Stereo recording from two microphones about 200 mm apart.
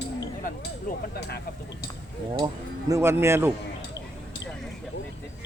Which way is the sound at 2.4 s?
15° right (ahead or behind).